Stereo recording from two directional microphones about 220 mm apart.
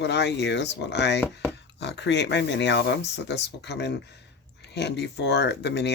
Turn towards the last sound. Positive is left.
turn(degrees=50)  # may be behind; listen again after turning